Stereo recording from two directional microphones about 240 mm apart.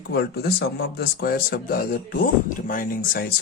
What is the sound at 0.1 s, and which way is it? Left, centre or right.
Speech, left.